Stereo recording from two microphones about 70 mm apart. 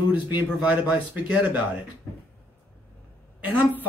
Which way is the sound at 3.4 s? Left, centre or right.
Right.